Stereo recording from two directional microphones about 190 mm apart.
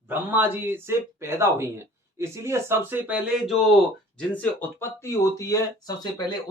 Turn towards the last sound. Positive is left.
turn(degrees=20)  # may be behind; listen again after turning